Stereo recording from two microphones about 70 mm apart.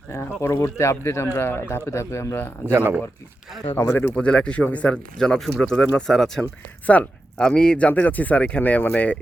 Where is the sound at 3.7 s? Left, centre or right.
Left.